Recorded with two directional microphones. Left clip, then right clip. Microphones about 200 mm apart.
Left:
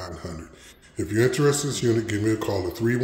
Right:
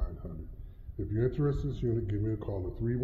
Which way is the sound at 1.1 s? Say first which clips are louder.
Left 11 dB; 25° left (ahead or behind).